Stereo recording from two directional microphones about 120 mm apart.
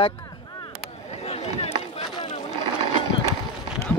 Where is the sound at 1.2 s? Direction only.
60° left (ahead or behind).